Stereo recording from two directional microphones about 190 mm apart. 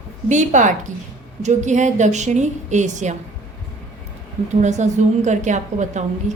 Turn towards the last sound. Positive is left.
turn(degrees=-40)  # may be behind; listen again after turning